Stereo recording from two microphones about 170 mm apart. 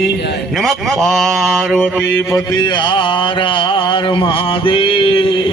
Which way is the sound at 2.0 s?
15° left (ahead or behind).